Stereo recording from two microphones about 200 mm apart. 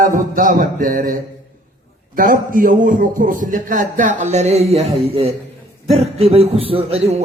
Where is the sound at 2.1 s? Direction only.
45° right (ahead or behind).